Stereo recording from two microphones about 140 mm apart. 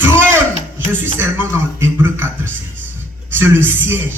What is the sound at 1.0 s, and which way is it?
A man's voice, 15° right (ahead or behind).